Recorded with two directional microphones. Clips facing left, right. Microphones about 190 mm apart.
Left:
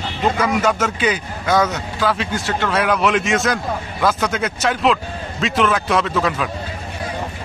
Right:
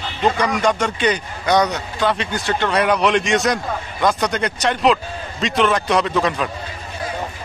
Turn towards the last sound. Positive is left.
turn(degrees=0)  # may be behind; listen again after turning